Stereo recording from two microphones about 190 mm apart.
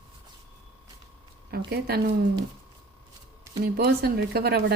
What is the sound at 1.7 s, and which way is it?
Speech, 55° right (ahead or behind).